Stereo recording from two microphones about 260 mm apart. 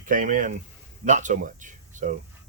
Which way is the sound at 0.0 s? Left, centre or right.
Right.